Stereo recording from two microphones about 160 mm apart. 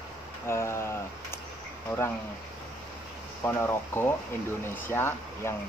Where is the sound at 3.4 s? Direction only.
15° left (ahead or behind).